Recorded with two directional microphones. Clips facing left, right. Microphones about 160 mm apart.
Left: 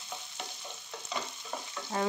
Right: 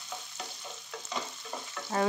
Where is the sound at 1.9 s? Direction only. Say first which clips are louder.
Right 3 dB; 90° right.